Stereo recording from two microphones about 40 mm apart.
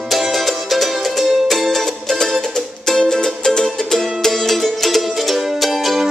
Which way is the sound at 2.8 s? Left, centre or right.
Centre.